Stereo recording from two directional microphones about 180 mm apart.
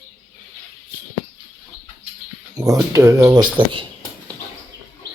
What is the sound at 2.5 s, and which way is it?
Speech, 20° right (ahead or behind).